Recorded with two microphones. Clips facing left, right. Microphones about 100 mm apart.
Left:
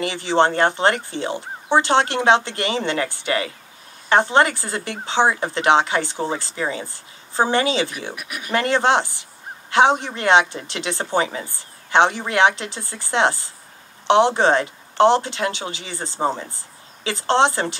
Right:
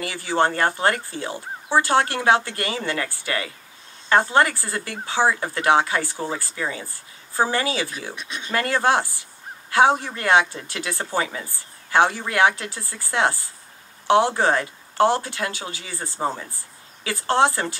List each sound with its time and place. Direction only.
0.0 s a man's voice: 25° left (ahead or behind)
8.2 s speech: 25° right (ahead or behind)
8.5 s a man's voice: 20° left (ahead or behind)